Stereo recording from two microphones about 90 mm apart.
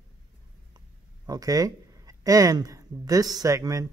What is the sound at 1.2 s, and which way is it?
Speech, 45° right (ahead or behind).